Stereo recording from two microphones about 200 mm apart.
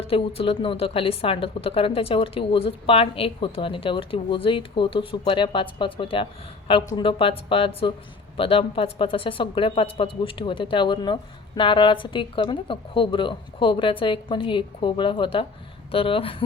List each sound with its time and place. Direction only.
0.1 s speech: 25° left (ahead or behind)